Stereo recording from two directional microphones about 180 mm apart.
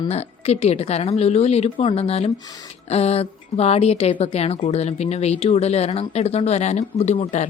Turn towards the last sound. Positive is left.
turn(degrees=40)  # may be behind; listen again after turning